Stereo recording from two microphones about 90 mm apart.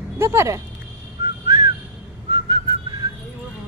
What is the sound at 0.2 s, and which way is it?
Speech, 30° right (ahead or behind).